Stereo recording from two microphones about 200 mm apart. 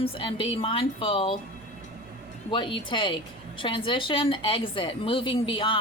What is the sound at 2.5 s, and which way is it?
A woman's voice, 25° left (ahead or behind).